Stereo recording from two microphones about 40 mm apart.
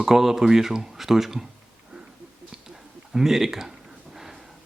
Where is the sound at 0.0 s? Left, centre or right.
Centre.